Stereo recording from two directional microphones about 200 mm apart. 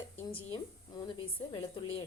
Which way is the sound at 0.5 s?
20° left (ahead or behind).